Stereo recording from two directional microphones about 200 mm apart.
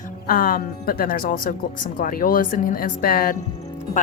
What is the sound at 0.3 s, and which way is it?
Speech, 45° left (ahead or behind).